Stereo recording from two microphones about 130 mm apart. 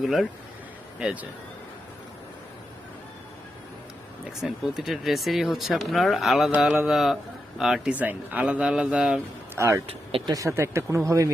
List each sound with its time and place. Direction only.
0.0 s speech: centre (ahead or behind)
4.4 s speech: 5° right (ahead or behind)
9.6 s speech: 20° right (ahead or behind)
9.8 s speech: 45° right (ahead or behind)
10.3 s speech: 20° right (ahead or behind)